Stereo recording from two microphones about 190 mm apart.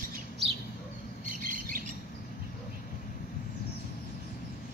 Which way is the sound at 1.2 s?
40° right (ahead or behind).